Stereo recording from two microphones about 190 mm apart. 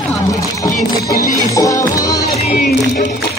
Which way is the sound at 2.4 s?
35° left (ahead or behind).